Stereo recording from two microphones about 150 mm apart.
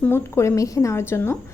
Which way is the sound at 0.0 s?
15° left (ahead or behind).